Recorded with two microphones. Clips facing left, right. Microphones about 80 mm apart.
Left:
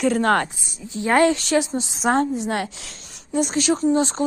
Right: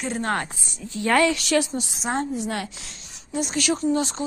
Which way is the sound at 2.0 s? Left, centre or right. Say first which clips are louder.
Left 7 dB; left.